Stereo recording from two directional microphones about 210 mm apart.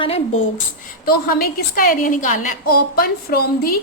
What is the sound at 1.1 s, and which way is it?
A woman's voice, 45° left (ahead or behind).